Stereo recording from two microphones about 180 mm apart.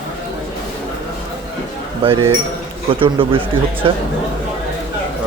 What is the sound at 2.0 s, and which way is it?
A man's voice, 25° right (ahead or behind).